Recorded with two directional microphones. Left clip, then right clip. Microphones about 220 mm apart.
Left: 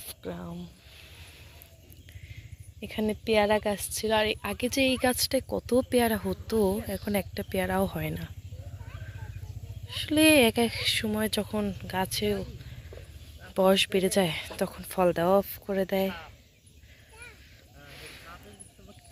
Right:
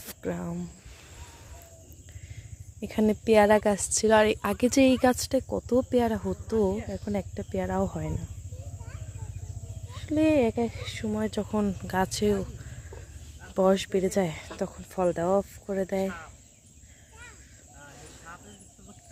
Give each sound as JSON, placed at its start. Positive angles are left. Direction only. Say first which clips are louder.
{"t": 0.1, "sound": "speech", "louder": "right 5 dB", "side_deg": -35}
{"t": 2.8, "sound": "speech", "louder": "right 4 dB", "side_deg": -30}
{"t": 9.9, "sound": "speech", "louder": "left 3 dB", "side_deg": -5}
{"t": 13.5, "sound": "speech", "louder": "left 1 dB", "side_deg": -10}
{"t": 16.0, "sound": "speech", "louder": "left 1 dB", "side_deg": -45}